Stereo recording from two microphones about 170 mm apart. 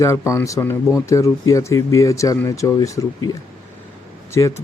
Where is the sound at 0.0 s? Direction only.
15° left (ahead or behind).